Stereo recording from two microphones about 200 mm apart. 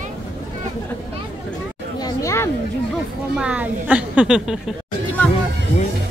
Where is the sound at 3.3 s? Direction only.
5° right (ahead or behind).